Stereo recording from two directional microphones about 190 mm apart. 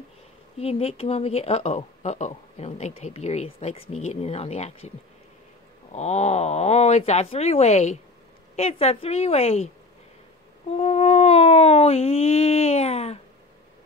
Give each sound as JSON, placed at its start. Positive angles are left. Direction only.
{"t": 0.6, "sound": "speech", "side_deg": 30}
{"t": 5.9, "sound": "speech", "side_deg": 35}
{"t": 10.8, "sound": "speech", "side_deg": 35}